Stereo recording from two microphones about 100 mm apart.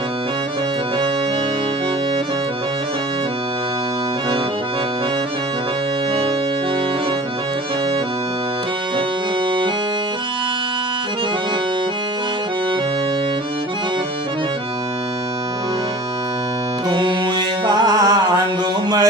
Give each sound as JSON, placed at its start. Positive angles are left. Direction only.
{"t": 16.9, "sound": "music", "side_deg": -55}